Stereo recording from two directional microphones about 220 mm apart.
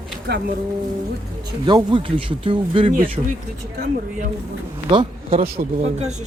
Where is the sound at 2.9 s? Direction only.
40° right (ahead or behind).